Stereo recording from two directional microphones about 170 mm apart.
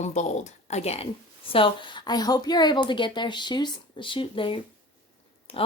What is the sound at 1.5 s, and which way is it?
Speech, 30° left (ahead or behind).